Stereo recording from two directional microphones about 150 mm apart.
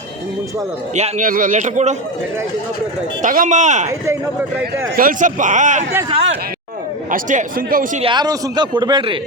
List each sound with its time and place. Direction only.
0.9 s a man's voice: 50° right (ahead or behind)
3.2 s a man's voice: 60° right (ahead or behind)
3.8 s speech: 20° right (ahead or behind)
4.9 s a man's voice: 65° right (ahead or behind)
7.1 s a man's voice: 60° right (ahead or behind)
8.0 s a man's voice: 30° right (ahead or behind)